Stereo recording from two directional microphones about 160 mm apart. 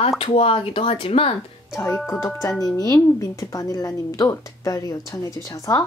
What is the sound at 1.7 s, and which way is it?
Speech, 15° left (ahead or behind).